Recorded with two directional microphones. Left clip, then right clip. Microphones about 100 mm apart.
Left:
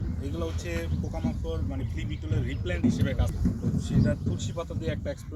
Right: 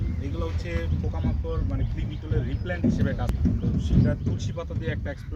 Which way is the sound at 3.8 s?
15° right (ahead or behind).